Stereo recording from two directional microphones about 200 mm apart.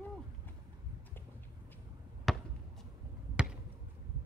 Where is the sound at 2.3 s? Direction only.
Centre (ahead or behind).